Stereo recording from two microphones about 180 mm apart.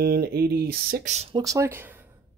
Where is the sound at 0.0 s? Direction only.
60° right (ahead or behind).